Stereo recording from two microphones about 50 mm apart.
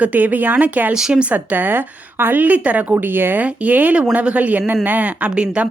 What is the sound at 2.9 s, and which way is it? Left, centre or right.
Speech, right.